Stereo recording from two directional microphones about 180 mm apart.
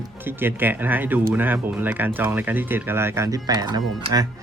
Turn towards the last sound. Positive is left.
turn(degrees=-20)  # may be behind; listen again after turning